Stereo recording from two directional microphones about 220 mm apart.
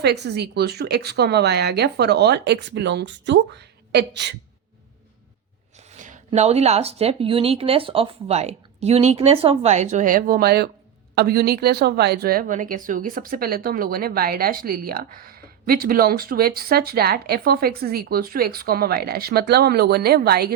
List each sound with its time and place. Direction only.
0.0 s a woman's voice: 50° right (ahead or behind)
5.9 s a woman's voice: 35° right (ahead or behind)